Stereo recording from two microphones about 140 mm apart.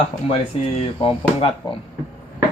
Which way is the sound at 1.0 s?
40° left (ahead or behind).